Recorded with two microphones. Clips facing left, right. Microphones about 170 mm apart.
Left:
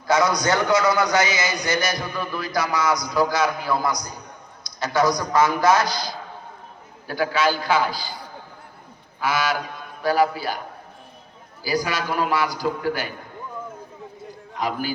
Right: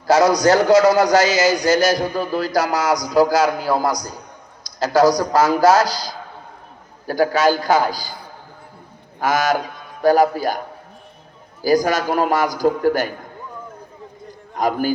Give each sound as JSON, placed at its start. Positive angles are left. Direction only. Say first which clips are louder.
{"t": 0.2, "sound": "a man's voice", "louder": "right 7 dB", "side_deg": -35}
{"t": 9.2, "sound": "a man's voice", "louder": "right 5 dB", "side_deg": -45}
{"t": 11.6, "sound": "a man's voice", "louder": "right 8 dB", "side_deg": -45}
{"t": 14.5, "sound": "a man's voice", "louder": "right 7 dB", "side_deg": -45}